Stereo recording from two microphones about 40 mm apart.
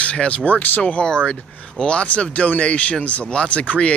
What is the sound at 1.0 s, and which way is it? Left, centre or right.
Speech, left.